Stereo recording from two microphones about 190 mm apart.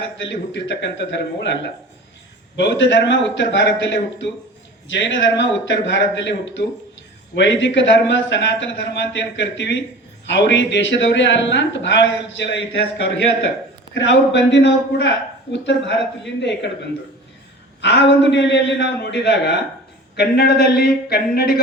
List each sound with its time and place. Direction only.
0.3 s a man's voice: 70° left (ahead or behind)
13.9 s a man's voice: 70° left (ahead or behind)
17.7 s a man's voice: 70° left (ahead or behind); by 21.6 s 55° left (ahead or behind)